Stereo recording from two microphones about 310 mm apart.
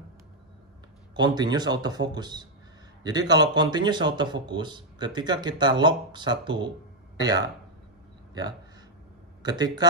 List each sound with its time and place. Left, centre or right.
1.1 s a man's voice: centre
9.4 s speech: centre